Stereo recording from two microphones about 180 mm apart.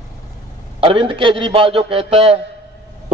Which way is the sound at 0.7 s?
30° right (ahead or behind).